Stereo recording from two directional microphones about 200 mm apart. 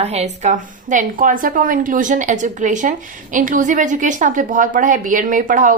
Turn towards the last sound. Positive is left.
turn(degrees=-40)  # may be behind; listen again after turning